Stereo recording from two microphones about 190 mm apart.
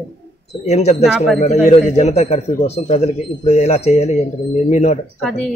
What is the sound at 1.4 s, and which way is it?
A man's voice, 35° left (ahead or behind).